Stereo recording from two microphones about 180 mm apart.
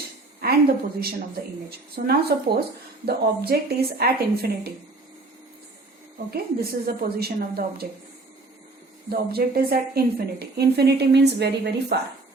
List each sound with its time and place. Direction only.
0.4 s a woman's voice: 60° right (ahead or behind)
6.3 s a woman's voice: 60° right (ahead or behind)
9.0 s a woman's voice: 60° right (ahead or behind)